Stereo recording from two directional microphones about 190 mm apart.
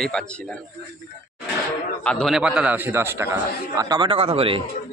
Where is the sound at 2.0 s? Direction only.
5° left (ahead or behind); by 4.6 s 30° right (ahead or behind).